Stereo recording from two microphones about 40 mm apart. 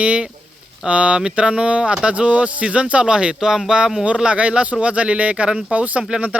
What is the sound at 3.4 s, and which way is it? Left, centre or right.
Speech, centre.